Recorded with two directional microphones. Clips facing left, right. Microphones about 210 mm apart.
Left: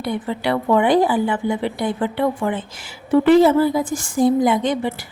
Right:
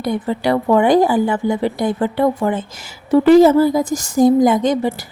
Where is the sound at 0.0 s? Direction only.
40° right (ahead or behind).